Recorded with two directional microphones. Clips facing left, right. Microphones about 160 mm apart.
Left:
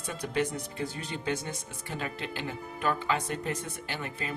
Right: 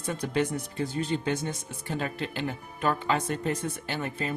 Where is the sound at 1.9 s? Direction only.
40° right (ahead or behind).